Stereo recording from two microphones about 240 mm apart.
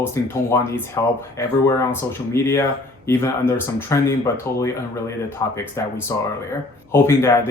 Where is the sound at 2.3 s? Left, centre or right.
Centre.